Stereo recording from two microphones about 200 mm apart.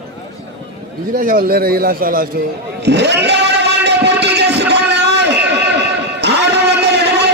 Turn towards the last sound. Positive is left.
turn(degrees=-55)  # may be behind; listen again after turning